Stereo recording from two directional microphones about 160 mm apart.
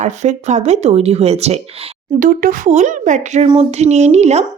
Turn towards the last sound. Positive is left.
turn(degrees=-45)  # may be behind; listen again after turning